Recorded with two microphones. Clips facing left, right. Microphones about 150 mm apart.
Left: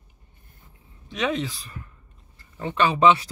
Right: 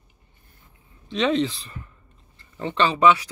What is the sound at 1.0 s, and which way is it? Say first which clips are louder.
Speech: right 5 dB; 10° left (ahead or behind).